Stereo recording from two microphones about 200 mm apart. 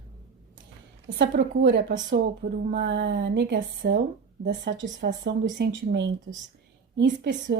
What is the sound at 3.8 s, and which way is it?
Speech, 45° right (ahead or behind).